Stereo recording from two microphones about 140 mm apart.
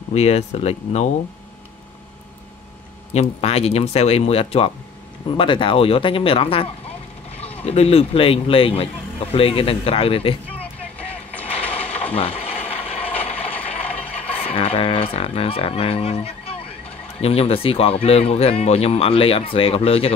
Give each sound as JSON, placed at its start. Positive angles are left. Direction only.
{"t": 0.1, "sound": "speech", "side_deg": 50}
{"t": 3.1, "sound": "speech", "side_deg": 50}
{"t": 7.3, "sound": "vehicle", "side_deg": 10}
{"t": 7.6, "sound": "speech", "side_deg": 45}
{"t": 10.5, "sound": "vehicle", "side_deg": 10}
{"t": 11.8, "sound": "mechanisms", "side_deg": 10}
{"t": 12.1, "sound": "a sound", "side_deg": 45}
{"t": 12.5, "sound": "a sound", "side_deg": 15}
{"t": 12.8, "sound": "a sound", "side_deg": 45}
{"t": 13.4, "sound": "ratchet", "side_deg": 10}
{"t": 14.3, "sound": "speech", "side_deg": 45}